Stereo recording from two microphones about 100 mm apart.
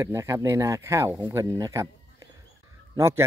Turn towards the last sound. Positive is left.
turn(degrees=-25)  # may be behind; listen again after turning